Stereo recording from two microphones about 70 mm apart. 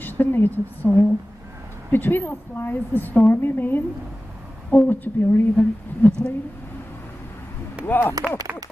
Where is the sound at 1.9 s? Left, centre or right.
Left.